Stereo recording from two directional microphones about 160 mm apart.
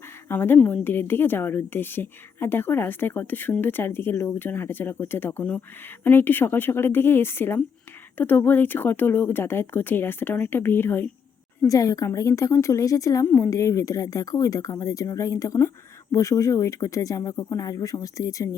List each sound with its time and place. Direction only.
0.3 s a woman's voice: 15° left (ahead or behind)